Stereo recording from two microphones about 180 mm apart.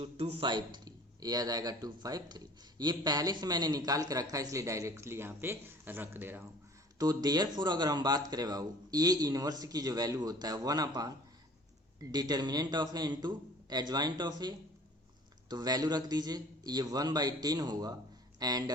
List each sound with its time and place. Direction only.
0.0 s a man's voice: 30° right (ahead or behind); by 6.5 s 10° right (ahead or behind)
7.0 s a man's voice: 20° right (ahead or behind)